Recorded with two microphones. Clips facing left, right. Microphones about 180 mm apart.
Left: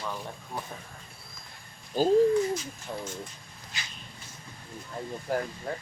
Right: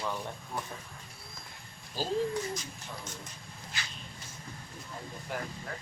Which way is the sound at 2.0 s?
55° left (ahead or behind).